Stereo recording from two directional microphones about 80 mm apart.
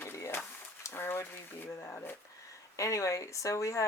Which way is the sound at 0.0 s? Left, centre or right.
Left.